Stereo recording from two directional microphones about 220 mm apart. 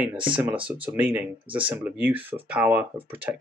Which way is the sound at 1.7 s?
10° right (ahead or behind).